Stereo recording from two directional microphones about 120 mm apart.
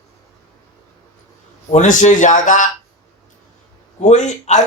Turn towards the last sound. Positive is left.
turn(degrees=75)  # may be behind; listen again after turning